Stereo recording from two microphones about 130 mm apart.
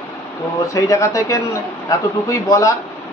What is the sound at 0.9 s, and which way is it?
Speech, 25° left (ahead or behind).